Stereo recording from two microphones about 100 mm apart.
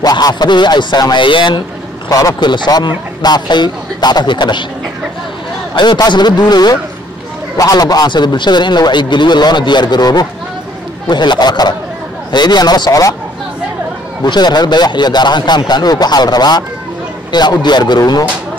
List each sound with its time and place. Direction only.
0.0 s a man's voice: 45° left (ahead or behind)
2.0 s a man's voice: 40° left (ahead or behind)
5.8 s a man's voice: 50° left (ahead or behind)
14.2 s a man's voice: 45° left (ahead or behind)